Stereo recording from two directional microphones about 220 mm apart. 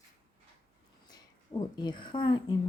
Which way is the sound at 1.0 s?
20° left (ahead or behind).